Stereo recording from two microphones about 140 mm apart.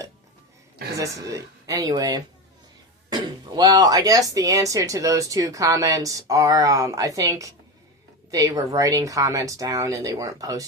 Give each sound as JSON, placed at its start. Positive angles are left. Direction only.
{"t": 0.9, "sound": "speech", "side_deg": -25}